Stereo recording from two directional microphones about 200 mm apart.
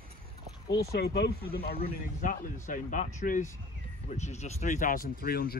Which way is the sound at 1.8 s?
40° left (ahead or behind).